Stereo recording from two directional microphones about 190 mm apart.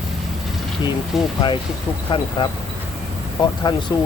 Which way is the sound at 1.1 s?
Centre (ahead or behind).